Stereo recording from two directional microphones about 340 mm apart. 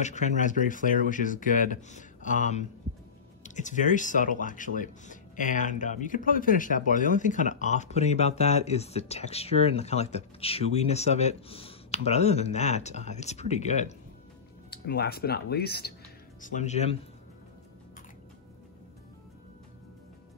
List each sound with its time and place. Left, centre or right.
0.0 s speech: left